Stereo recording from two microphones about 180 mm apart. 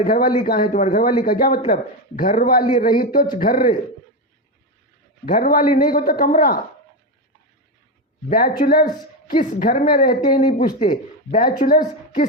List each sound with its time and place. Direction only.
0.0 s a man's voice: 50° left (ahead or behind)
5.2 s a man's voice: 55° left (ahead or behind)
8.3 s a man's voice: 50° left (ahead or behind)